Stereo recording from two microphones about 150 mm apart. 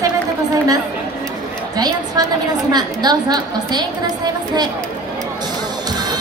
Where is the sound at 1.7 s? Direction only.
25° right (ahead or behind).